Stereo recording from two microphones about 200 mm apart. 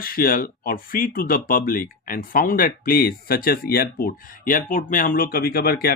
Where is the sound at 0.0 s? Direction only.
45° left (ahead or behind).